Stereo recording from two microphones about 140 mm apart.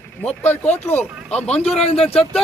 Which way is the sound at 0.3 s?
10° left (ahead or behind).